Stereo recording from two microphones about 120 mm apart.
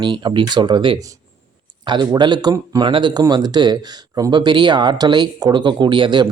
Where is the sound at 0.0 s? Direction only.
40° right (ahead or behind).